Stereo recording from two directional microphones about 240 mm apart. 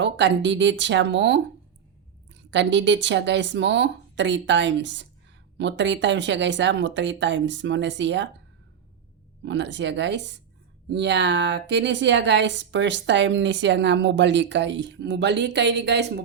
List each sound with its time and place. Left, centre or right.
0.0 s speech: right
9.4 s speech: right